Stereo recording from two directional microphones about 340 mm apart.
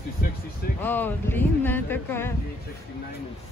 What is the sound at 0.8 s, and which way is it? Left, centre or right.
Speech, centre.